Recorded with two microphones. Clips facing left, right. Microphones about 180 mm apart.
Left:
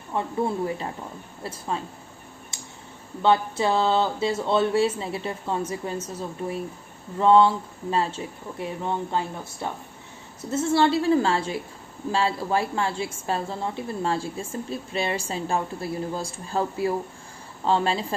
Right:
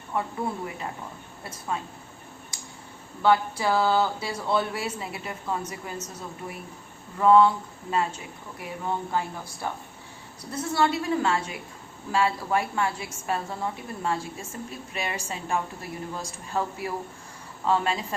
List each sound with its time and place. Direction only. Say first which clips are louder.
0.1 s speech: left 1 dB; 25° left (ahead or behind)
1.5 s speech: left 2 dB; 30° left (ahead or behind)
2.5 s tick: left 1 dB; 25° left (ahead or behind)
3.2 s speech: left 1 dB; 25° left (ahead or behind)
7.2 s a woman's voice: left 1 dB; 25° left (ahead or behind)